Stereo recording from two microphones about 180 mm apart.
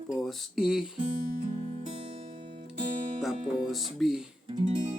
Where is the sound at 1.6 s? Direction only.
35° right (ahead or behind).